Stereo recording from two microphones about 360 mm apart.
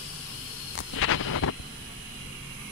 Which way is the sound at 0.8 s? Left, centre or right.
Left.